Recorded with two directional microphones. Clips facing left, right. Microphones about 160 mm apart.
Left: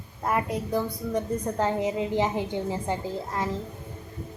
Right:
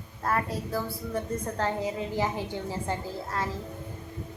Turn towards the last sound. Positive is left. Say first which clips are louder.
# left 3 dB
turn(degrees=15)  # may be behind; listen again after turning